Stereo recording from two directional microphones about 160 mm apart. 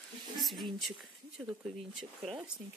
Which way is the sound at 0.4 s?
Centre (ahead or behind).